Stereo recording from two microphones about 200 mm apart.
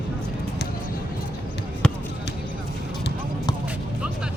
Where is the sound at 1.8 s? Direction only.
5° left (ahead or behind).